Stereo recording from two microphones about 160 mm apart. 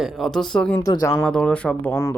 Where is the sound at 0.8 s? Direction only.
25° left (ahead or behind).